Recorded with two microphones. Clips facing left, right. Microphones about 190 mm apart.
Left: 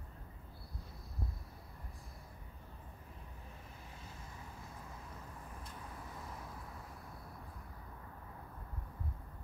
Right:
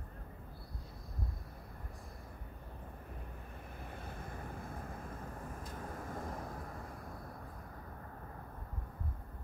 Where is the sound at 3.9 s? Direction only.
55° right (ahead or behind).